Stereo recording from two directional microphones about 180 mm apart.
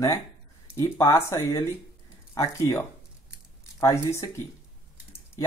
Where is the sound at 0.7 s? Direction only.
20° left (ahead or behind).